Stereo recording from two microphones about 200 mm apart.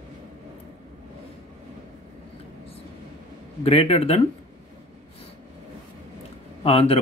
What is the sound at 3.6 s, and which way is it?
Speech, 30° left (ahead or behind).